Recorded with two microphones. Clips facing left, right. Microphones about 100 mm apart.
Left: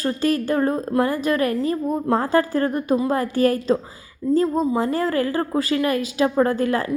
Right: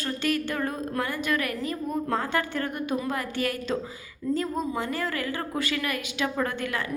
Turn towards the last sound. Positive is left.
turn(degrees=35)  # may be behind; listen again after turning